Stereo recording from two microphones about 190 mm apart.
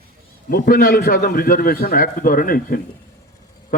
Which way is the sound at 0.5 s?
50° left (ahead or behind).